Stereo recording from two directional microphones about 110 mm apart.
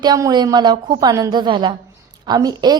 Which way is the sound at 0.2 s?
35° right (ahead or behind).